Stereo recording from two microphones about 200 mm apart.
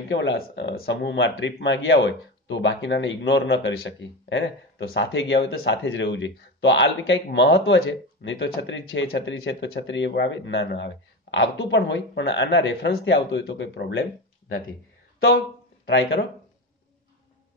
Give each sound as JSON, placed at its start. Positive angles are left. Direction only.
{"t": 0.1, "sound": "speech", "side_deg": 65}
{"t": 15.9, "sound": "speech", "side_deg": 60}